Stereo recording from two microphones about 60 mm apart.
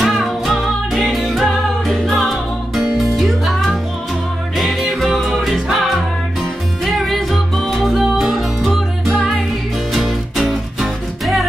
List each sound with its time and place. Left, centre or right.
0.0 s music: centre